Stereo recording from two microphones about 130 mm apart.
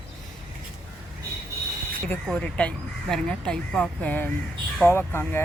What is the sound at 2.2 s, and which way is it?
Speech, 10° left (ahead or behind).